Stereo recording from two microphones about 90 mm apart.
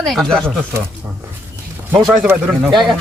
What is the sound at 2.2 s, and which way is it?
Speech, 15° right (ahead or behind).